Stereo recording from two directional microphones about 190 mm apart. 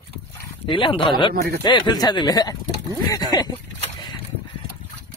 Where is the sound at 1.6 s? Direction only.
25° left (ahead or behind).